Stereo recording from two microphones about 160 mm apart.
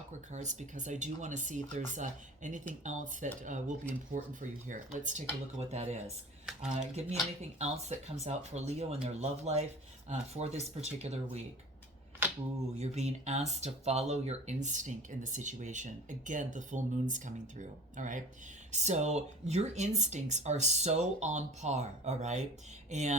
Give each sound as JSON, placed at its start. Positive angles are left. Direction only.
{"t": 0.3, "sound": "speech", "side_deg": -50}
{"t": 12.8, "sound": "speech", "side_deg": -45}